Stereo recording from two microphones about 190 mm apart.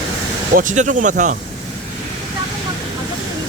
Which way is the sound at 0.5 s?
45° right (ahead or behind).